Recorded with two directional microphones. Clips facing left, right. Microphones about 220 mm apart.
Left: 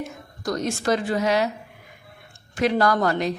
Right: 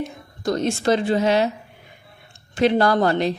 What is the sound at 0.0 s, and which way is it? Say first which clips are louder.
A woman's voice: right 4 dB; 25° right (ahead or behind).